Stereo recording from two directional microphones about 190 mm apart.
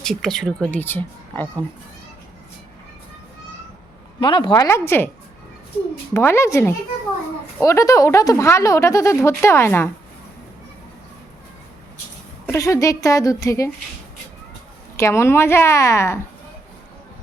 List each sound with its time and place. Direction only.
0.0 s a woman's voice: centre (ahead or behind)
4.2 s a woman's voice: 25° left (ahead or behind)
6.1 s speech: 15° left (ahead or behind)
12.5 s speech: 15° left (ahead or behind)
14.9 s speech: 15° left (ahead or behind)